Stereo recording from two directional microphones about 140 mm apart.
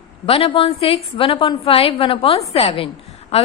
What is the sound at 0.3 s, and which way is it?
A woman's voice, 40° left (ahead or behind).